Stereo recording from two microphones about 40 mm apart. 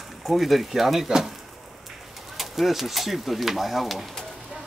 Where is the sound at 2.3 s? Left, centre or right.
Centre.